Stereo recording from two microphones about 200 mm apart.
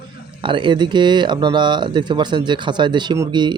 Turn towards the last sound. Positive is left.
turn(degrees=-20)  # may be behind; listen again after turning